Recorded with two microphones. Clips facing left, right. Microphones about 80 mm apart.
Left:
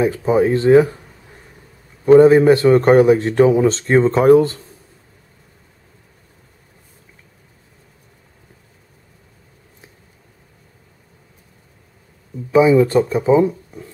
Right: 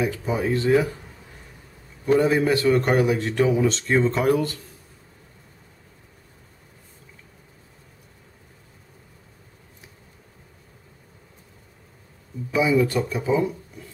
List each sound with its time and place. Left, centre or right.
0.0 s a man's voice: left
2.0 s a man's voice: left
12.5 s a man's voice: left